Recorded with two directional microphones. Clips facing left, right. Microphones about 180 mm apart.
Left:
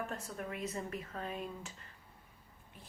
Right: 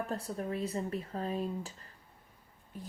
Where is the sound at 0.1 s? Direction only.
35° right (ahead or behind).